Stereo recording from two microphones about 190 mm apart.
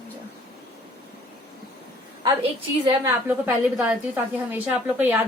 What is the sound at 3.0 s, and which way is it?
A woman's voice, 10° right (ahead or behind).